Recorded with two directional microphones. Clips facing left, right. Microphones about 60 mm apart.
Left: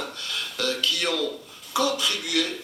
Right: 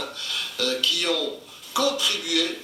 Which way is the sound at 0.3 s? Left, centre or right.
Left.